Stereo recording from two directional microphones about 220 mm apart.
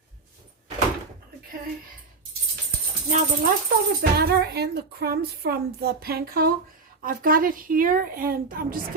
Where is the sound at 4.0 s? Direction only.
45° right (ahead or behind).